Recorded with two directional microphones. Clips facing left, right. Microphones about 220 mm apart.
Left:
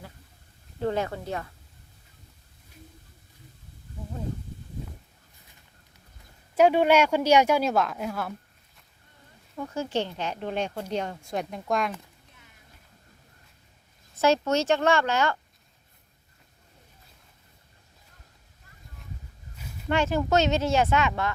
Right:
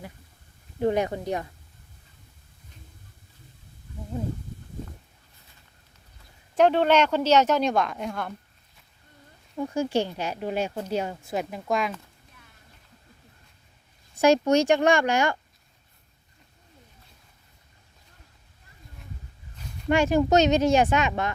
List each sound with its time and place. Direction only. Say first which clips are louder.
0.8 s speech: right 4 dB; 15° right (ahead or behind)
6.6 s speech: even; 10° left (ahead or behind)
9.6 s speech: right 4 dB; 10° right (ahead or behind)
14.2 s speech: right 4 dB; 15° right (ahead or behind)
19.9 s speech: right 4 dB; 15° right (ahead or behind)